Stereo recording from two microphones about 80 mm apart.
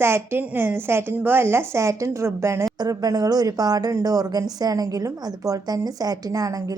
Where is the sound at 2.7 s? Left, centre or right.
Right.